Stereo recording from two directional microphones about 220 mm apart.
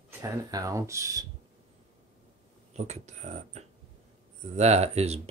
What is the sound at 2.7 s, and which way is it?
Speech, 30° right (ahead or behind).